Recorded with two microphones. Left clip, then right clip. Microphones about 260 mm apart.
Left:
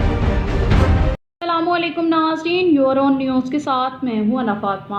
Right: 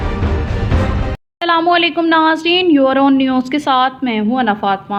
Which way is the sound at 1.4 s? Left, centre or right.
Right.